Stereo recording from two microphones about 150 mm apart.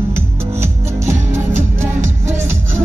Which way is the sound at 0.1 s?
15° right (ahead or behind).